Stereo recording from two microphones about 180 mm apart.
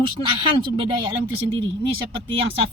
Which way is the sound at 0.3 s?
25° right (ahead or behind).